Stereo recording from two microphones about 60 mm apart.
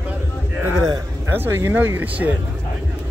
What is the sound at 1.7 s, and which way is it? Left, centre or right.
Speech, right.